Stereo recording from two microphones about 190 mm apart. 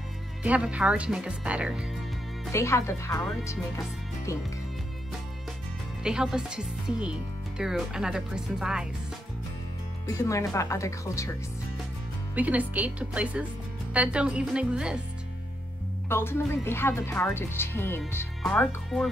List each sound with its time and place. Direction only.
0.4 s speech: 5° right (ahead or behind)
2.5 s speech: 15° left (ahead or behind)
6.0 s speech: 5° right (ahead or behind)
10.0 s speech: 15° left (ahead or behind)
12.4 s speech: 10° right (ahead or behind)
16.1 s speech: 10° left (ahead or behind)